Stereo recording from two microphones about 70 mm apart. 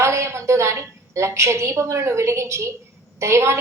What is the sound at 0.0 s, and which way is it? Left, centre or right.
A woman's voice, right.